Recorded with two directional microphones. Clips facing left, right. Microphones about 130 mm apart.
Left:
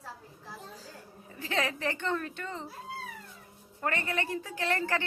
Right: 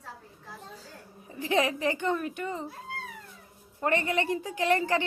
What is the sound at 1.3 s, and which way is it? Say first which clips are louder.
A woman's voice: right 6 dB; 15° right (ahead or behind).